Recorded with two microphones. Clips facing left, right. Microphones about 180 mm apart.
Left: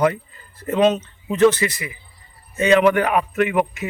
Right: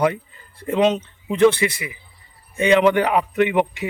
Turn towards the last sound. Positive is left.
turn(degrees=-20)  # may be behind; listen again after turning